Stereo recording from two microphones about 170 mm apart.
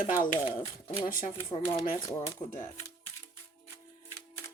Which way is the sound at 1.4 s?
35° left (ahead or behind).